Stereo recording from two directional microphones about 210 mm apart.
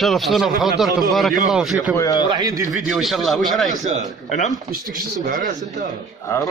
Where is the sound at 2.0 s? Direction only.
15° left (ahead or behind).